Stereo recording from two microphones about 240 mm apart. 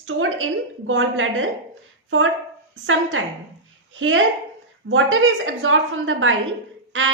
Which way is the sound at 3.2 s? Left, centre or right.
Right.